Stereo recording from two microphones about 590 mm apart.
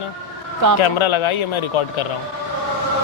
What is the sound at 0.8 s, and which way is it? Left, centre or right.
Speech, left.